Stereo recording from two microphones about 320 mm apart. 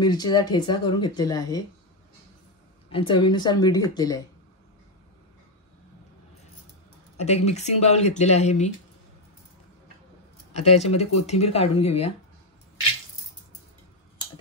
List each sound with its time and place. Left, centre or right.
0.0 s speech: centre
2.9 s speech: centre
7.2 s speech: centre
10.6 s speech: centre